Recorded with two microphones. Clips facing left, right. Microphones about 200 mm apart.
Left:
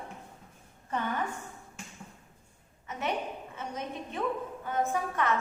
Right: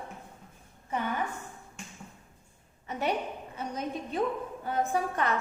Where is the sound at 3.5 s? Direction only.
35° right (ahead or behind).